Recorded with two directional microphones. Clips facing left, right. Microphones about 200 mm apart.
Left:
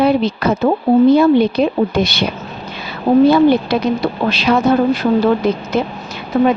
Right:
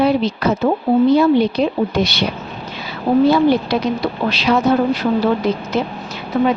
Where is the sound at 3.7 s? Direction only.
55° left (ahead or behind).